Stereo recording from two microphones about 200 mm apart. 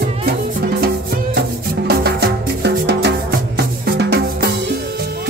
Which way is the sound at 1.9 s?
50° right (ahead or behind).